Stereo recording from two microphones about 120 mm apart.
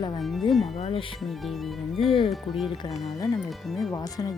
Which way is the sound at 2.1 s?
50° left (ahead or behind).